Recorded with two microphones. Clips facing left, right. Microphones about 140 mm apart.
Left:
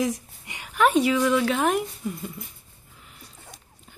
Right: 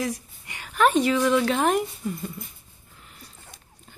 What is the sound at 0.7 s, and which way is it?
Speech, 10° left (ahead or behind).